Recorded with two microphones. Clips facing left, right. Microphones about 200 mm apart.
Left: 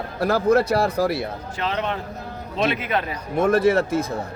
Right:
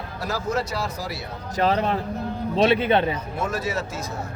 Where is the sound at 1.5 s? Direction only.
40° right (ahead or behind).